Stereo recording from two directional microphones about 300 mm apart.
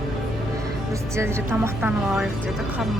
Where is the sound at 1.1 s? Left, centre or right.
Centre.